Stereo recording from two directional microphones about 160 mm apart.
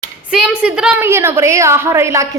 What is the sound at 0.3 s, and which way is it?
A woman's voice, 5° right (ahead or behind).